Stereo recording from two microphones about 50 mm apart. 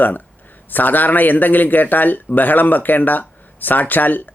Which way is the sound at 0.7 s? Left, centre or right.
Left.